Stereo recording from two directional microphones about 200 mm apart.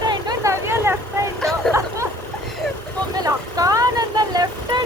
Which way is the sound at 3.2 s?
20° right (ahead or behind).